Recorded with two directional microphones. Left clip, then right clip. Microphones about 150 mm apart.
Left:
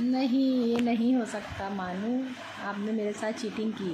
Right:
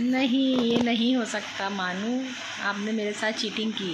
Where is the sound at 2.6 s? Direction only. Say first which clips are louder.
Right 3 dB; 5° left (ahead or behind).